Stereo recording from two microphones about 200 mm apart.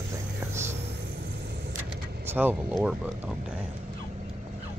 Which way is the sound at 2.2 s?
10° right (ahead or behind).